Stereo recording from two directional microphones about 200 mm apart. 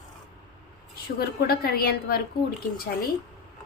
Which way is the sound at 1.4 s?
50° left (ahead or behind).